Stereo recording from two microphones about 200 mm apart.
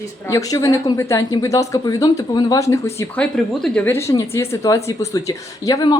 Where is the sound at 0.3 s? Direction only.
15° left (ahead or behind).